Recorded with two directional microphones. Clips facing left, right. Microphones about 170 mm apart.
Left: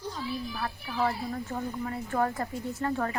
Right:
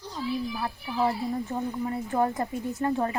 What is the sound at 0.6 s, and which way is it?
Speech, 20° right (ahead or behind).